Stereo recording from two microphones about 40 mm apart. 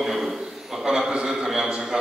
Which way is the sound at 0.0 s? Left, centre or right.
Centre.